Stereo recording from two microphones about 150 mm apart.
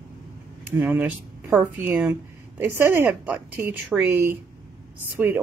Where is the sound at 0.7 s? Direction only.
10° right (ahead or behind).